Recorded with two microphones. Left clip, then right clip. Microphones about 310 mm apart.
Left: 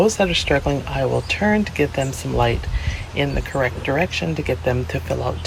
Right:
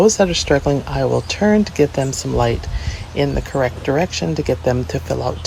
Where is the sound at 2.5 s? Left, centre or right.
Right.